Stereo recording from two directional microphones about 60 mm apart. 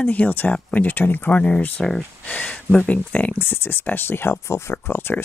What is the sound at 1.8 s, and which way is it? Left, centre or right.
Speech, centre.